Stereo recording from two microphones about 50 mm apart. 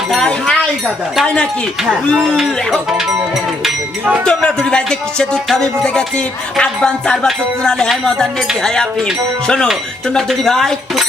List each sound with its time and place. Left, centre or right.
0.1 s a sound: centre
4.3 s music: centre
10.2 s music: centre